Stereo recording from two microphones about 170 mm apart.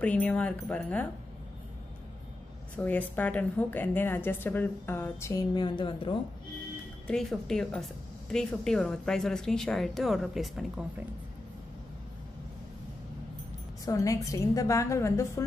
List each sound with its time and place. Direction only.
0.0 s a woman's voice: 10° left (ahead or behind)
2.7 s a woman's voice: 10° left (ahead or behind); by 6.1 s 30° left (ahead or behind)
7.1 s a woman's voice: 5° left (ahead or behind)
13.8 s a woman's voice: 20° left (ahead or behind)